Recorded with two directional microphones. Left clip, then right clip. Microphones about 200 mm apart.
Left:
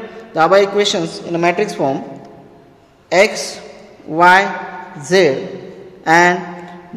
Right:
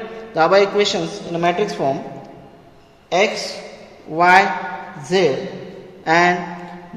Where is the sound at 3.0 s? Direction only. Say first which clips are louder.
Left 5 dB; 40° left (ahead or behind).